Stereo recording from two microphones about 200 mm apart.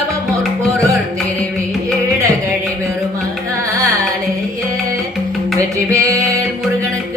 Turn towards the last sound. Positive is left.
turn(degrees=-15)  # may be behind; listen again after turning